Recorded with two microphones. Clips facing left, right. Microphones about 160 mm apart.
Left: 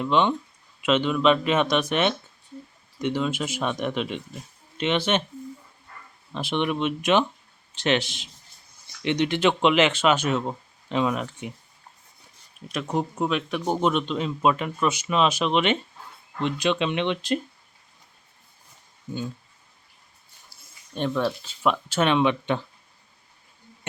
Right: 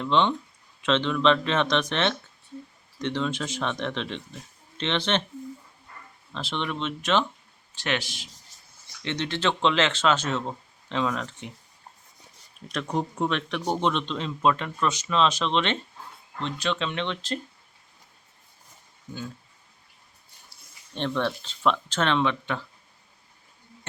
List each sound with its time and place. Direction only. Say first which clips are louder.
0.0 s speech: left 1 dB; 10° left (ahead or behind)
6.3 s speech: left 5 dB; 15° left (ahead or behind)
8.5 s a sound: even; 90° right
9.0 s speech: left 5 dB; 15° left (ahead or behind)
12.6 s speech: left 2 dB; 5° left (ahead or behind)
20.5 s speech: left 3 dB; 10° left (ahead or behind)